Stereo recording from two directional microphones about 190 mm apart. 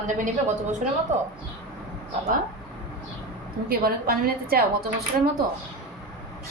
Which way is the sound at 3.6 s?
50° right (ahead or behind).